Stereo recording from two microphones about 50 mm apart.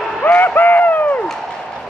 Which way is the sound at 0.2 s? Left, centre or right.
Left.